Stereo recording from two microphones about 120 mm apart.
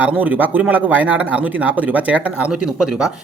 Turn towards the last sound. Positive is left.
turn(degrees=-5)  # may be behind; listen again after turning